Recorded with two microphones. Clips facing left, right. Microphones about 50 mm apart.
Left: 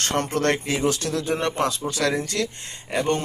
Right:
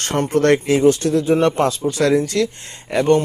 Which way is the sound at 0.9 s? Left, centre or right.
Centre.